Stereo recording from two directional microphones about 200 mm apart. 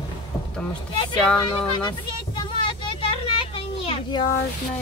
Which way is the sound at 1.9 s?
25° left (ahead or behind).